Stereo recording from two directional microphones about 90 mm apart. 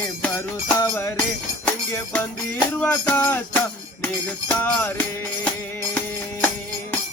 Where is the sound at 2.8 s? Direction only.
15° left (ahead or behind).